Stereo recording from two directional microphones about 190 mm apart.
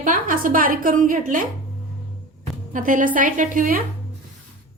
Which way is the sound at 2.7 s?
45° right (ahead or behind).